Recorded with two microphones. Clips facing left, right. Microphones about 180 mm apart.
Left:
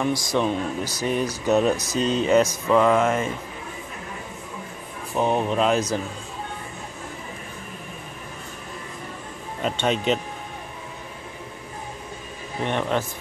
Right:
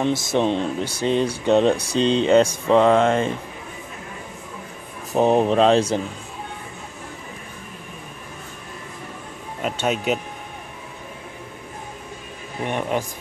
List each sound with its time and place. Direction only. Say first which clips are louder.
0.0 s speech: right 2 dB; 25° right (ahead or behind)
5.1 s speech: right 5 dB; 35° right (ahead or behind)
9.6 s speech: even; 5° right (ahead or behind)
12.6 s speech: even; 10° right (ahead or behind)